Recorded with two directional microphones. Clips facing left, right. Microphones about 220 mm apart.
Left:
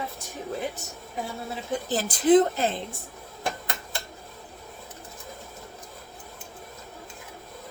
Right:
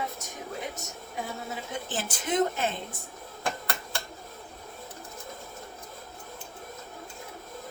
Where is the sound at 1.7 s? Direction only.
35° left (ahead or behind).